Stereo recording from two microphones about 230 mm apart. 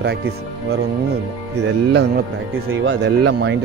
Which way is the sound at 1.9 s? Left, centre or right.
Right.